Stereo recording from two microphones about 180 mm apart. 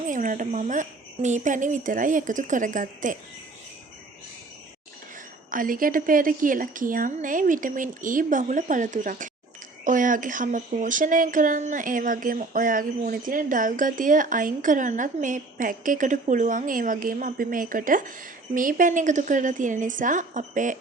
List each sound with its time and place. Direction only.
0.1 s speech: 45° right (ahead or behind)
5.5 s speech: 50° right (ahead or behind)